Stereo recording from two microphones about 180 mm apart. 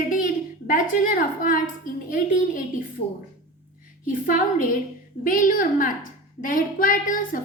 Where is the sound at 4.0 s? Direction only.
50° left (ahead or behind).